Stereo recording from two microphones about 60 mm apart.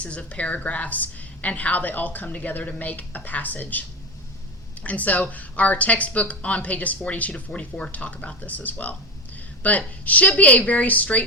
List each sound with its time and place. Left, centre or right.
0.0 s speech: left